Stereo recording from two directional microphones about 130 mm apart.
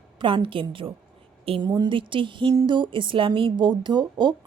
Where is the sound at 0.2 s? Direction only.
40° right (ahead or behind).